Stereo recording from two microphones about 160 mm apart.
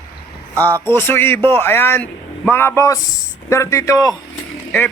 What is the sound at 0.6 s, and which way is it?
A man's voice, 15° left (ahead or behind).